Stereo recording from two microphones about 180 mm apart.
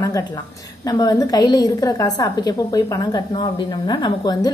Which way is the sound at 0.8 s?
20° left (ahead or behind).